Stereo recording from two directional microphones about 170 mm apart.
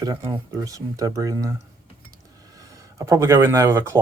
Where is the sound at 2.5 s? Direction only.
20° right (ahead or behind).